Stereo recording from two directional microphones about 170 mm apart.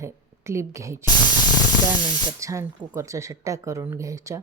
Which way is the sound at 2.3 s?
20° right (ahead or behind).